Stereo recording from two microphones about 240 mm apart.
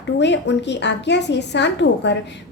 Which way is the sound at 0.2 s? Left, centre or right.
Left.